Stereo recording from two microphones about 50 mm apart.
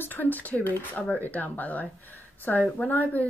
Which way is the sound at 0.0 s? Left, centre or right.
Left.